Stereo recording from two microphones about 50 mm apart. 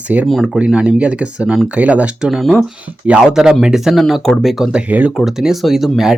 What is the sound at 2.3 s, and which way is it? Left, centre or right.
Speech, centre.